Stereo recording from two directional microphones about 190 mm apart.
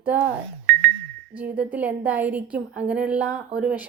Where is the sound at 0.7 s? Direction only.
55° right (ahead or behind).